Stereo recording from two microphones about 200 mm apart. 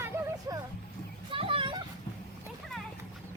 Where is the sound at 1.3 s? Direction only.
25° right (ahead or behind).